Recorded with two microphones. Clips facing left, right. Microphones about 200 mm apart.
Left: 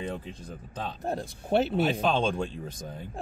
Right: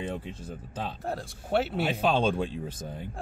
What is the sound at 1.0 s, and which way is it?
Speech, 20° left (ahead or behind).